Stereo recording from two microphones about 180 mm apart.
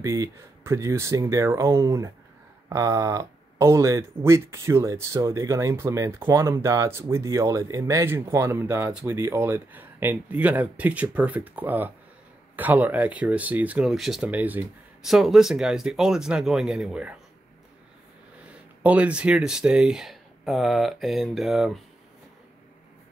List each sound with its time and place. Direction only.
0.0 s speech: 20° right (ahead or behind)
18.8 s speech: 10° right (ahead or behind)